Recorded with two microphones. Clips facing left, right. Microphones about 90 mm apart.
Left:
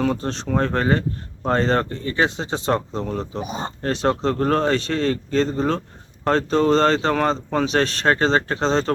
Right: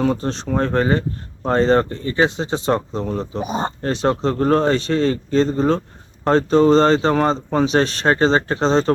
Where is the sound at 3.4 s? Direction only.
35° right (ahead or behind).